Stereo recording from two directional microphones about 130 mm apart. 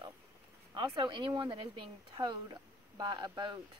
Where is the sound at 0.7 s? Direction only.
35° right (ahead or behind).